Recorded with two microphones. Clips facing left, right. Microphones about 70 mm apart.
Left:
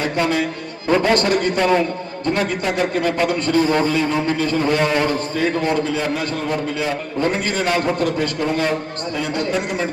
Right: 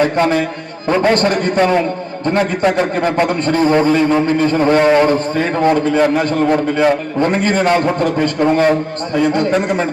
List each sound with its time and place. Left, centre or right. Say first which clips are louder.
0.0 s a man's voice: right 6 dB; right